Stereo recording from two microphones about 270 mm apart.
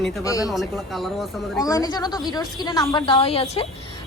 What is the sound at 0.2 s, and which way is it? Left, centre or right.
Speech, centre.